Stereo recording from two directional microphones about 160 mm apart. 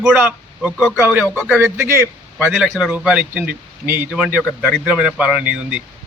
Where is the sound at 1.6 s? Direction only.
15° right (ahead or behind).